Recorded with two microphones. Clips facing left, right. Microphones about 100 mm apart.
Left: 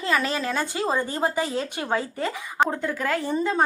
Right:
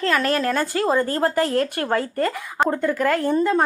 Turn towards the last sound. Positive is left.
turn(degrees=0)  # may be behind; listen again after turning